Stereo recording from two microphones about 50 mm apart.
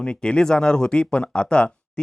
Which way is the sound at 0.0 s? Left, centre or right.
Centre.